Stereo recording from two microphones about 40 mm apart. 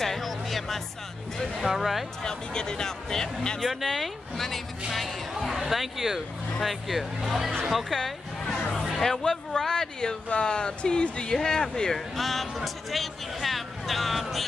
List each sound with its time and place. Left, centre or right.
0.0 s music: centre
1.6 s speech: centre
2.2 s speech: centre
3.6 s speech: centre
7.9 s speech: centre
12.2 s speech: centre